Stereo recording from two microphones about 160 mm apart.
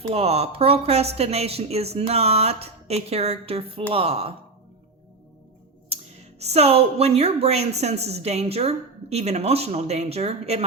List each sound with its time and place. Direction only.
0.1 s a woman's voice: 40° right (ahead or behind)
5.9 s a sound: 40° right (ahead or behind)
6.4 s a woman's voice: 40° right (ahead or behind)